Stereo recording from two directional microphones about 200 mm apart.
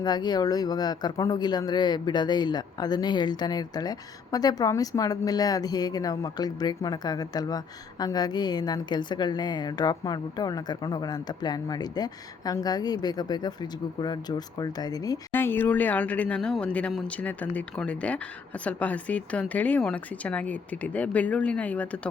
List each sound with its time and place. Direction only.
0.0 s speech: 20° left (ahead or behind)